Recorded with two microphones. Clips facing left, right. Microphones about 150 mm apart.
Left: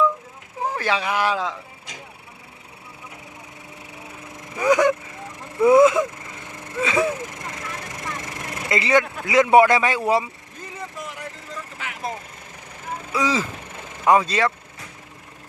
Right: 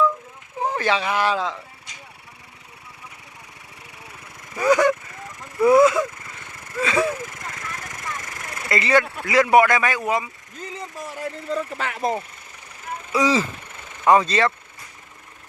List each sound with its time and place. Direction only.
0.6 s speech: 5° left (ahead or behind)
4.5 s speech: 15° left (ahead or behind)
8.0 s vehicle: 25° left (ahead or behind)
8.8 s speech: 15° left (ahead or behind)
11.5 s speech: 70° right (ahead or behind)
13.1 s speech: centre (ahead or behind)